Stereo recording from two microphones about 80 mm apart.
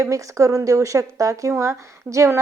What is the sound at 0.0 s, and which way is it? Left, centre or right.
A woman's voice, right.